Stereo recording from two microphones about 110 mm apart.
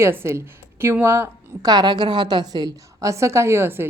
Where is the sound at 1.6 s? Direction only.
40° right (ahead or behind).